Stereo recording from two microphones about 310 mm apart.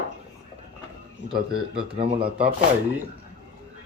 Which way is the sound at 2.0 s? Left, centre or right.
Centre.